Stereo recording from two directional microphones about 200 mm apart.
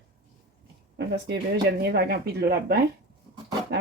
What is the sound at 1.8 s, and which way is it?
Speech, 55° right (ahead or behind).